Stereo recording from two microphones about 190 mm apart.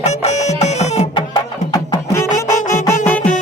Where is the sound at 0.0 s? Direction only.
35° left (ahead or behind).